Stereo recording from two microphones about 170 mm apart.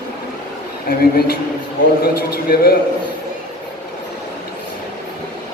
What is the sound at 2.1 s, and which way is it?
Speech, 65° left (ahead or behind).